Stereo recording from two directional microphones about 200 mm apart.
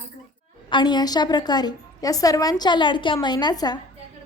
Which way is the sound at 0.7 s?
20° left (ahead or behind).